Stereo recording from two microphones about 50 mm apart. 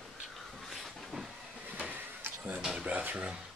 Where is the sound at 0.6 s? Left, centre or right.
Centre.